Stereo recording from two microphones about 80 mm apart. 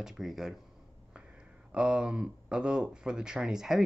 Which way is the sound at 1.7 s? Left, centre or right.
Centre.